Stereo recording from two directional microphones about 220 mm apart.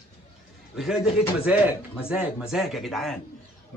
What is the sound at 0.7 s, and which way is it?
A man's voice, centre (ahead or behind).